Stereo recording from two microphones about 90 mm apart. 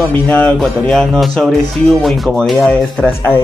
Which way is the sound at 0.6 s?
5° left (ahead or behind).